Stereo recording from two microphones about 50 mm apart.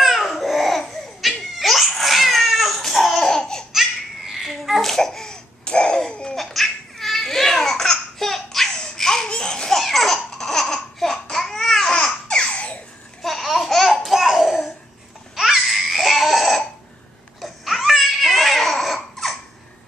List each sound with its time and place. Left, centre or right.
0.0 s babbling: centre
1.5 s crying: centre
4.3 s babbling: centre
6.3 s laughter: centre; by 12.7 s left
13.2 s laughter: centre
15.3 s a sound: centre
17.4 s babbling: centre